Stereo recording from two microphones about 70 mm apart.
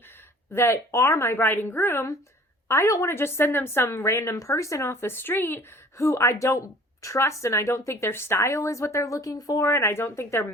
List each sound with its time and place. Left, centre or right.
0.5 s speech: left
2.6 s speech: left
6.1 s speech: left
9.6 s speech: left